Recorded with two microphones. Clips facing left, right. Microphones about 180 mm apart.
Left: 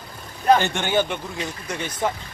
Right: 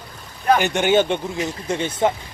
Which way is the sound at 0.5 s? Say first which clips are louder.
Right 4 dB; 15° right (ahead or behind).